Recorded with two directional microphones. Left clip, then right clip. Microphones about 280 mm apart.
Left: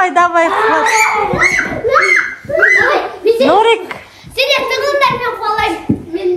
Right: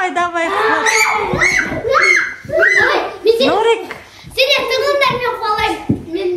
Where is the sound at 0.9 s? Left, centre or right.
Centre.